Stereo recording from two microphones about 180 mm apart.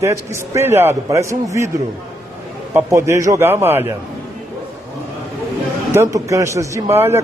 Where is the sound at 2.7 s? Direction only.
15° right (ahead or behind).